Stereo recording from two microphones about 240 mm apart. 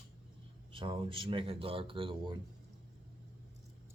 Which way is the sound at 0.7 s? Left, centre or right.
Right.